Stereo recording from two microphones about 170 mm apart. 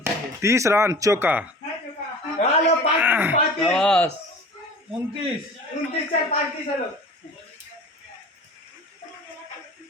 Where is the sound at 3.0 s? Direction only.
10° right (ahead or behind).